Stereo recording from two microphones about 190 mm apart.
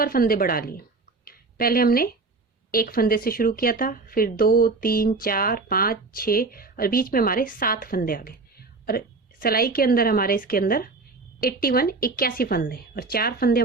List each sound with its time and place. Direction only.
0.0 s speech: 50° left (ahead or behind)
1.2 s a sound: 50° left (ahead or behind)
2.7 s speech: 50° left (ahead or behind)